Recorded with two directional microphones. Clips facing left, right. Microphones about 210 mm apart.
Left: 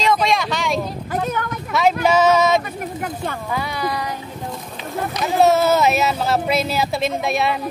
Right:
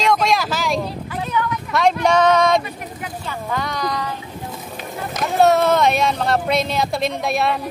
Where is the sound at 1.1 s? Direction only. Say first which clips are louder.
Left 1 dB; 45° left (ahead or behind).